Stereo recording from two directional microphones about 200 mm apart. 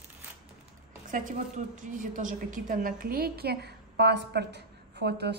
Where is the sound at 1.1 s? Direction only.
40° right (ahead or behind).